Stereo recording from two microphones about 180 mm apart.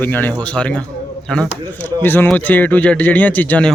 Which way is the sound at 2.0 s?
10° left (ahead or behind).